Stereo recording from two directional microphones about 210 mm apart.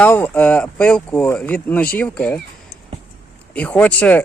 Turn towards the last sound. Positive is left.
turn(degrees=5)  # may be behind; listen again after turning